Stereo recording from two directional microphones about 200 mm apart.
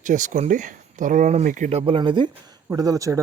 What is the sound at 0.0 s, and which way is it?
Speech, 40° right (ahead or behind).